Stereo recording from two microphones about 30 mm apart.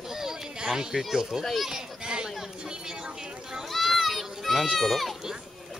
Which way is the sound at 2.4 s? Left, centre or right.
Right.